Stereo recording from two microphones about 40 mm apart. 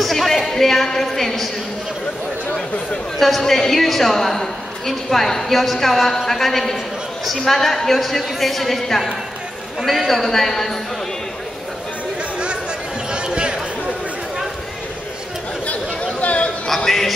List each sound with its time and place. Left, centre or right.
0.0 s a woman's voice: centre
3.2 s a woman's voice: centre
9.8 s a man's voice: centre
13.1 s a sound: right
16.2 s a sound: left
16.6 s music: centre